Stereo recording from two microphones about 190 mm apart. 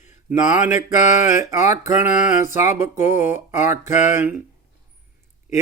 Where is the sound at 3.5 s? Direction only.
40° left (ahead or behind).